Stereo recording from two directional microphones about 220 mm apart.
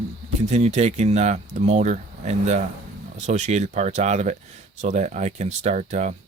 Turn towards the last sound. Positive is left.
turn(degrees=-30)  # may be behind; listen again after turning